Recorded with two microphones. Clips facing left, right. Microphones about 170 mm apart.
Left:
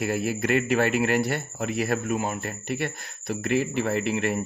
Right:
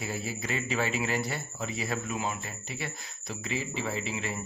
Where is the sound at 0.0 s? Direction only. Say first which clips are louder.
Left 9 dB; 65° left (ahead or behind).